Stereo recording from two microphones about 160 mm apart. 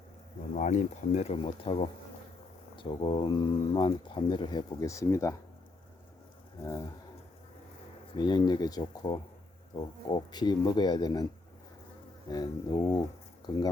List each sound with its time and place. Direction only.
0.5 s speech: 50° left (ahead or behind); by 5.4 s 20° left (ahead or behind)
8.1 s speech: 30° left (ahead or behind)
12.3 s speech: 25° left (ahead or behind)